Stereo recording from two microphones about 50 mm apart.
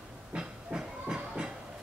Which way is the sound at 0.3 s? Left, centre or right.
Centre.